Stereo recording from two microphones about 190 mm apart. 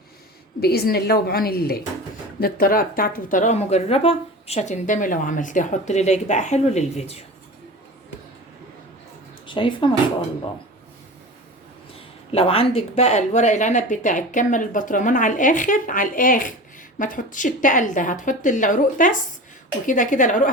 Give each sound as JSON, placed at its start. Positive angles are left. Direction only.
{"t": 0.6, "sound": "a woman's voice", "side_deg": 55}
{"t": 9.5, "sound": "speech", "side_deg": 25}
{"t": 11.9, "sound": "speech", "side_deg": 30}